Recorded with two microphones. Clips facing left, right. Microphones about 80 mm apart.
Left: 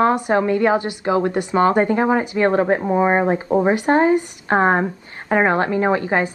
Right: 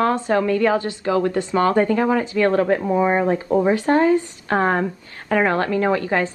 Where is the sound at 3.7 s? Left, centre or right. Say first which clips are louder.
Left 1 dB; left.